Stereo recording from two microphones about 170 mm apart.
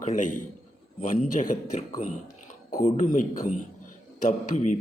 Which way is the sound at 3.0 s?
50° left (ahead or behind).